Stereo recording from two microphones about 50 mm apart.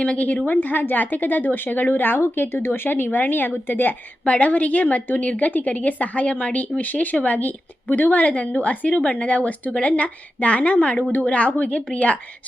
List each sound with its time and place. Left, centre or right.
0.0 s a woman's voice: left
4.3 s a woman's voice: left